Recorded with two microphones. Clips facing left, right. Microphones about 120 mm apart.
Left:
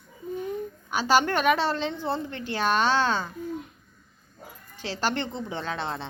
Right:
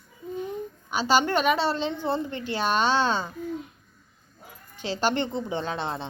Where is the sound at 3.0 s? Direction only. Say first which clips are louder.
Right 1 dB; 20° right (ahead or behind).